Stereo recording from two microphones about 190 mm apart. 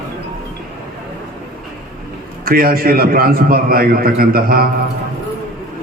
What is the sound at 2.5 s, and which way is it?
A man's voice, 50° right (ahead or behind).